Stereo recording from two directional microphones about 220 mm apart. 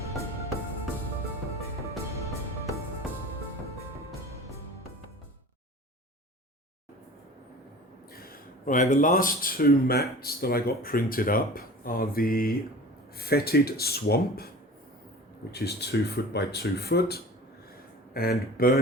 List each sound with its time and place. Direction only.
8.1 s speech: 40° left (ahead or behind)
15.5 s speech: 50° left (ahead or behind)